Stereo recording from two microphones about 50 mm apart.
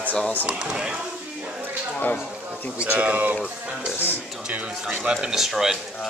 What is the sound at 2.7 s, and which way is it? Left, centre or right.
Speech, right.